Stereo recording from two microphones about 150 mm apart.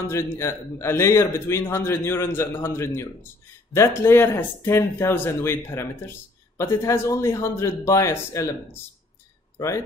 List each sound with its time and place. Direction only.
0.0 s a man's voice: 20° left (ahead or behind)